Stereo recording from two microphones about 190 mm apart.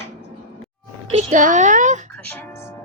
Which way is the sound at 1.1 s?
35° right (ahead or behind).